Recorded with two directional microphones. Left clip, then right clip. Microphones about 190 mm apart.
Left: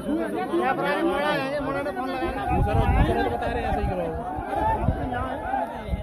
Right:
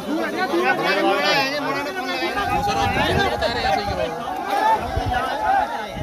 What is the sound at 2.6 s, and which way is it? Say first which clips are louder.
Speech: right 5 dB; 45° left (ahead or behind).